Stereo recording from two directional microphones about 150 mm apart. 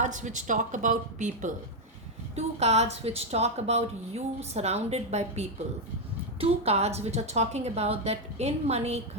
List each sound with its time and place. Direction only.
0.0 s a woman's voice: 55° right (ahead or behind)